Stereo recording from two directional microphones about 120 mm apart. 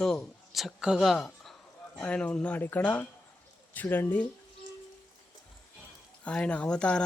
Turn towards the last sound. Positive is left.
turn(degrees=10)  # may be behind; listen again after turning